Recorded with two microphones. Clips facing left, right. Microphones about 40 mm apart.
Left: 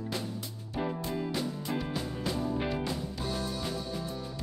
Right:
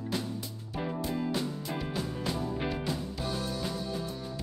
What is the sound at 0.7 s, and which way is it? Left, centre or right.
Music, centre.